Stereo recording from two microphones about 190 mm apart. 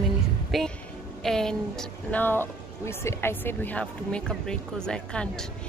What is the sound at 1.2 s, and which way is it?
A woman's voice, centre (ahead or behind).